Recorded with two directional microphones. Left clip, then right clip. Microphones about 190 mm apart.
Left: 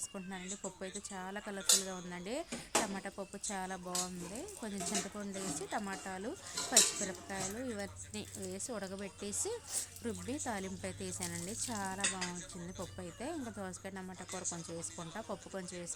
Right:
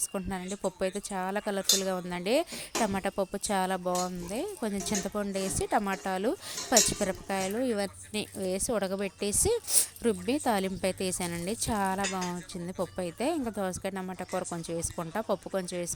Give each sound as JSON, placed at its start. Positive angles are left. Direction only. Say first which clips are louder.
{"t": 0.1, "sound": "speech", "louder": "right 10 dB", "side_deg": -40}
{"t": 12.3, "sound": "speech", "louder": "right 8 dB", "side_deg": -30}
{"t": 13.0, "sound": "speech", "louder": "right 12 dB", "side_deg": -40}